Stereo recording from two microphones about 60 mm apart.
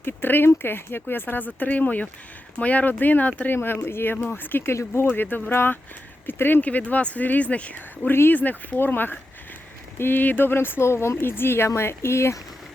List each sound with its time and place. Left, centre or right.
0.0 s speech: left
3.5 s speech: left
8.1 s speech: left